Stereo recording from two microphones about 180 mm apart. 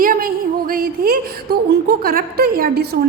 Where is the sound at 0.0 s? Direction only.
50° right (ahead or behind).